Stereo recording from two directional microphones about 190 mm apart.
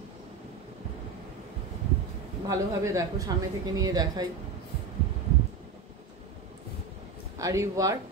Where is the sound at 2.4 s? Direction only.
15° right (ahead or behind).